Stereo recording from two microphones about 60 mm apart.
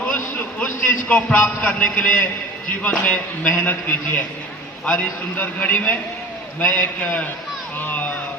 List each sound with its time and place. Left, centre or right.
0.3 s a sound: left
1.6 s a man's voice: left
7.8 s music: left